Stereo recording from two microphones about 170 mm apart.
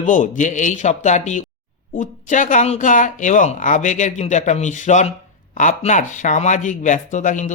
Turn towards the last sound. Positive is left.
turn(degrees=45)  # may be behind; listen again after turning